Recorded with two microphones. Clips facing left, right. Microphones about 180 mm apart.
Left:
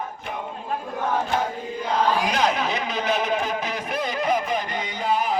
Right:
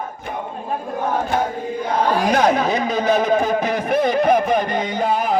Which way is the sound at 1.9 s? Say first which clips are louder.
Right 4 dB; 50° right (ahead or behind).